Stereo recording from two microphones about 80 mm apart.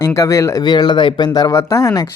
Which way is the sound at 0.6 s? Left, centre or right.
Left.